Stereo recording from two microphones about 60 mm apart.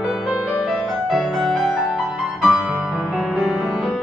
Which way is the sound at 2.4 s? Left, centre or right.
Centre.